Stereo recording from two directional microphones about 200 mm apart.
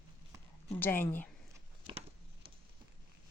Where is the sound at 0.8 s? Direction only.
10° left (ahead or behind).